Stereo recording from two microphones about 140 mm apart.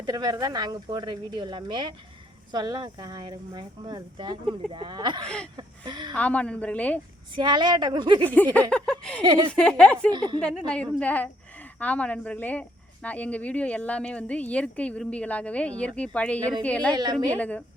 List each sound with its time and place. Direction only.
0.0 s speech: 25° right (ahead or behind)
6.1 s speech: 10° left (ahead or behind)
7.3 s speech: 30° right (ahead or behind)
8.2 s speech: 10° left (ahead or behind)
10.1 s speech: 30° right (ahead or behind)
10.4 s speech: 5° left (ahead or behind)
16.9 s speech: 30° right (ahead or behind)
17.3 s speech: 10° left (ahead or behind)